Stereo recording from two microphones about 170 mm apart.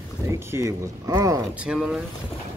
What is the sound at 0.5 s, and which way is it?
Speech, 20° right (ahead or behind).